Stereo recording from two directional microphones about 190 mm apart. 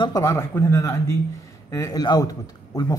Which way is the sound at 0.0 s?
15° left (ahead or behind).